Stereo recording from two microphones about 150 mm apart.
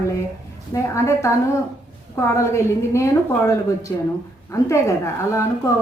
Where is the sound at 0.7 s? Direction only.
20° left (ahead or behind).